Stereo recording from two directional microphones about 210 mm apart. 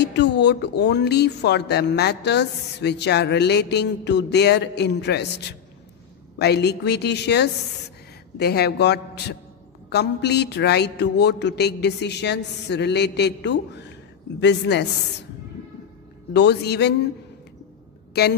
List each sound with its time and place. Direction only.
0.0 s speech: 55° left (ahead or behind)
6.3 s a woman's voice: 50° left (ahead or behind)
16.3 s speech: 55° left (ahead or behind)
18.1 s speech: 50° left (ahead or behind)